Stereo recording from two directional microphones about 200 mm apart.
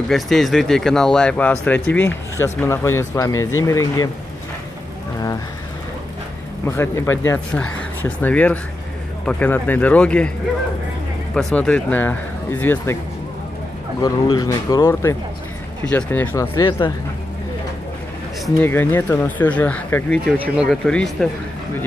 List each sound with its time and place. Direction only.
0.1 s speech: centre (ahead or behind); by 4.1 s 15° left (ahead or behind)
6.6 s speech: 10° left (ahead or behind)
11.3 s speech: 5° left (ahead or behind)
14.0 s speech: 20° left (ahead or behind)
18.6 s speech: 10° left (ahead or behind)